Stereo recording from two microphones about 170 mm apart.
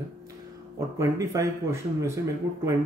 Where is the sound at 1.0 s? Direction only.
15° right (ahead or behind).